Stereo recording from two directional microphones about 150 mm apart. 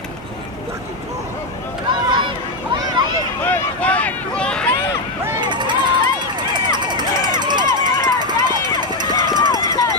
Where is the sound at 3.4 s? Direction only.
10° left (ahead or behind).